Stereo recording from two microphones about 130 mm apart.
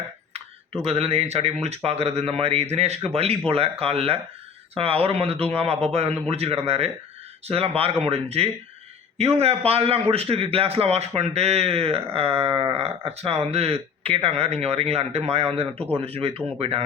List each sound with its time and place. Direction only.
0.9 s a man's voice: 50° right (ahead or behind)